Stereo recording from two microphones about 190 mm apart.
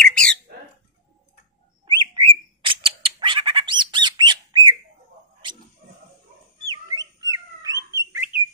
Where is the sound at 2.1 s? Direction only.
25° right (ahead or behind).